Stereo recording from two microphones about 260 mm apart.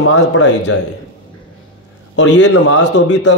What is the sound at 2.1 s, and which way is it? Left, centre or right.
A man's voice, left.